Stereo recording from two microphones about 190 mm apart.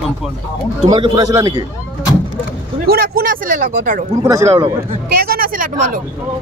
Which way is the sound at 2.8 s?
50° right (ahead or behind).